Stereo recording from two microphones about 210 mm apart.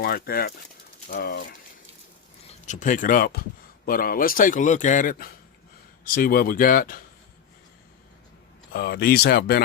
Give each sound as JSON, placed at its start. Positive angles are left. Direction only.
{"t": 0.0, "sound": "speech", "side_deg": 45}
{"t": 2.6, "sound": "a man's voice", "side_deg": 35}
{"t": 8.7, "sound": "speech", "side_deg": 45}